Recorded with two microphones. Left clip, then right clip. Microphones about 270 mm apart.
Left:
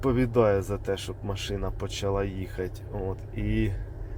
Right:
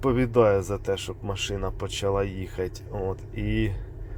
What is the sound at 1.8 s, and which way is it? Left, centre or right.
Speech, right.